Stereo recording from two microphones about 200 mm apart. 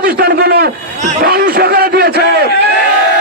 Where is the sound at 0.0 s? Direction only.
55° right (ahead or behind).